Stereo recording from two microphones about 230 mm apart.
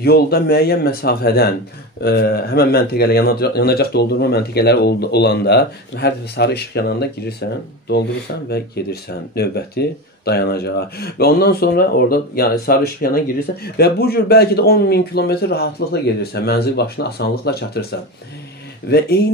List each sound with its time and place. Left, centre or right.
0.0 s speech: left
8.5 s speech: left
18.9 s speech: left